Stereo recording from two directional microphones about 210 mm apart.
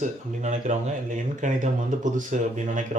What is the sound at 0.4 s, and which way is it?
Speech, 35° right (ahead or behind).